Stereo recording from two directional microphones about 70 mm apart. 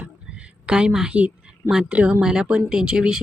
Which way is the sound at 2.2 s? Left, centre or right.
Centre.